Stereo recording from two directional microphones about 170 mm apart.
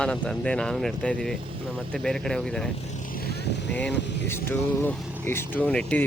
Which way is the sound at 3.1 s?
65° left (ahead or behind).